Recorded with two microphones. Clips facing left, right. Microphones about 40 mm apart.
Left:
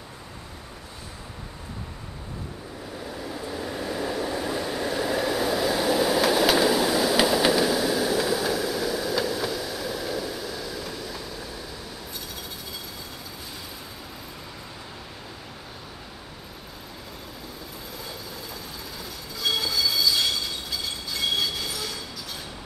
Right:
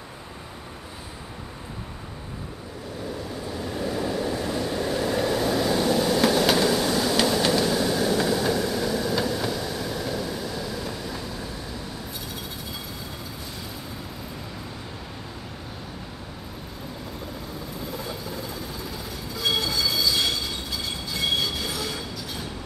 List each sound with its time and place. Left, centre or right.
3.4 s train: centre
19.3 s train: centre